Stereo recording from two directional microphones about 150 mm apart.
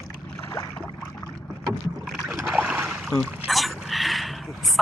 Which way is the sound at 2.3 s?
10° right (ahead or behind).